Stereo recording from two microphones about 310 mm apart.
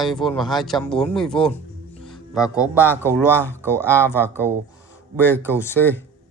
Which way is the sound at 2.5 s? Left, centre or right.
Centre.